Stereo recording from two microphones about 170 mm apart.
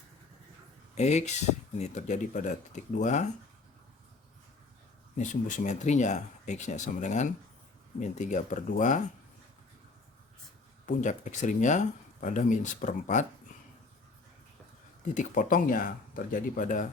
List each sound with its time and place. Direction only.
0.9 s speech: 40° left (ahead or behind)
5.1 s speech: 45° left (ahead or behind)
10.8 s speech: 45° left (ahead or behind)
15.0 s speech: 45° left (ahead or behind)